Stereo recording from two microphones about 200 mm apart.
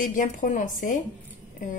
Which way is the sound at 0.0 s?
40° left (ahead or behind).